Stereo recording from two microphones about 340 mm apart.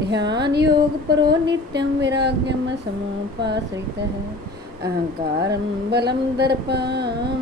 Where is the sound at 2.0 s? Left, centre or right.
Right.